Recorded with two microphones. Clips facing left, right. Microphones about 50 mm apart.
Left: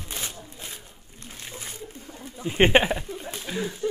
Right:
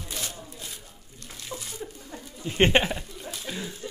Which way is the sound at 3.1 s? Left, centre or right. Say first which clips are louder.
Left 3 dB; left.